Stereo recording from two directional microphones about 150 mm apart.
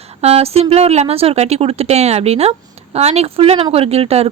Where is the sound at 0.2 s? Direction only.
45° right (ahead or behind).